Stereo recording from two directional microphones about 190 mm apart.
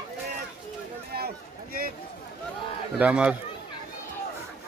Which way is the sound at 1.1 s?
50° right (ahead or behind).